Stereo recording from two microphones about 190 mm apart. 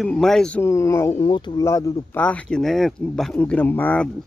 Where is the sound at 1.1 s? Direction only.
25° left (ahead or behind).